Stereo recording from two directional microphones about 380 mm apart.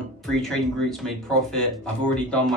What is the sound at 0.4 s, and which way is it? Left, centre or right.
Speech, centre.